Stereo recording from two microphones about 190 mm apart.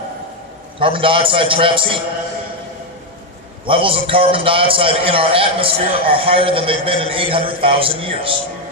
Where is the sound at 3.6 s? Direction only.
25° right (ahead or behind).